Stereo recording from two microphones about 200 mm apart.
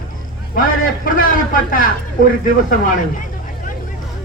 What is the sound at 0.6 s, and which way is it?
A man's voice, 45° left (ahead or behind).